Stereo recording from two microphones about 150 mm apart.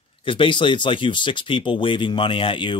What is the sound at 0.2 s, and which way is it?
Speech, 35° left (ahead or behind).